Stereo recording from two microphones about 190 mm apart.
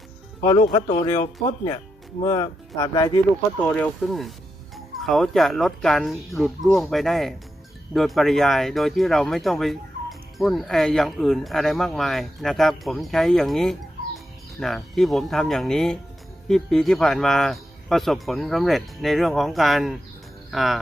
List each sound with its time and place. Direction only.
0.7 s speech: 25° left (ahead or behind)
3.6 s speech: 10° left (ahead or behind)